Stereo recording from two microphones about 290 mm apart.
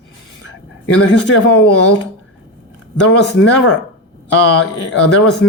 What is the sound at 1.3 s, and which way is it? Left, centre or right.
Speech, left.